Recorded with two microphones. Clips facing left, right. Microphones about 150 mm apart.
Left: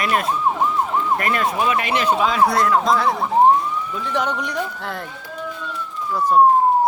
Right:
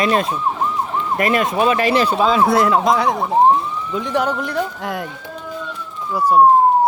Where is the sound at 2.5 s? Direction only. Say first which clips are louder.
Right 3 dB; 20° right (ahead or behind).